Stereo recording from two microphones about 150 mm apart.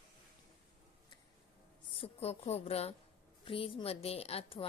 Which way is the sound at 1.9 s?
40° left (ahead or behind).